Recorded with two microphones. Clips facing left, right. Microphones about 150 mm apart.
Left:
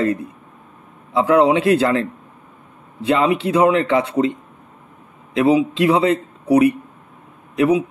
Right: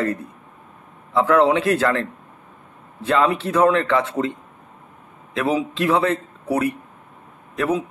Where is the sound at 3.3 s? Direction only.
15° left (ahead or behind).